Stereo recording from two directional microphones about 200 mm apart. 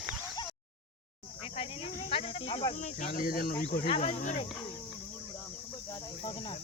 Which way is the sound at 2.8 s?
40° left (ahead or behind).